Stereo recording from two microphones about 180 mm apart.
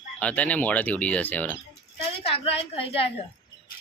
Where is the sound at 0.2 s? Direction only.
5° left (ahead or behind).